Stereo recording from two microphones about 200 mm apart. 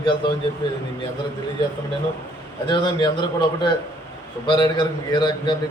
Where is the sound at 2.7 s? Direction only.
25° left (ahead or behind).